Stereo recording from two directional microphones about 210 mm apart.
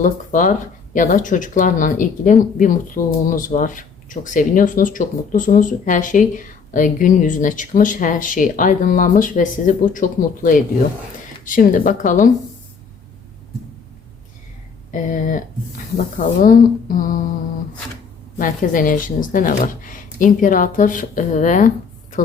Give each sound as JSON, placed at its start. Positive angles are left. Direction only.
{"t": 0.0, "sound": "speech", "side_deg": 40}
{"t": 14.9, "sound": "speech", "side_deg": 40}
{"t": 18.3, "sound": "speech", "side_deg": 40}